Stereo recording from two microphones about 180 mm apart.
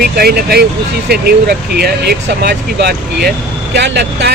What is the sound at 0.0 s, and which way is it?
Speech, 55° right (ahead or behind).